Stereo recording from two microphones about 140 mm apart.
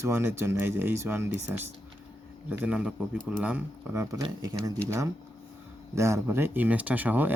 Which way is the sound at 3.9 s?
25° right (ahead or behind).